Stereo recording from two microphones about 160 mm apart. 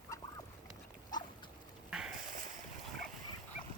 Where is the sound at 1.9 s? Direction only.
5° right (ahead or behind).